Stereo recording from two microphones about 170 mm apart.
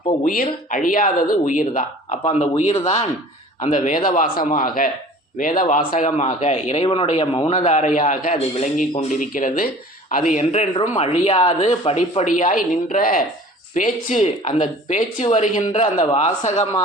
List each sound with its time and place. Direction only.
0.4 s a man's voice: 50° left (ahead or behind)
12.2 s speech: 50° left (ahead or behind)